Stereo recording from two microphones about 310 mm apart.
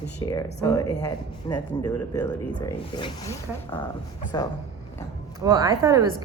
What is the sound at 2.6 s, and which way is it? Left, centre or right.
Speech, centre.